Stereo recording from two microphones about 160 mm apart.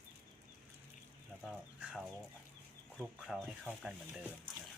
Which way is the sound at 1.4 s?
5° right (ahead or behind).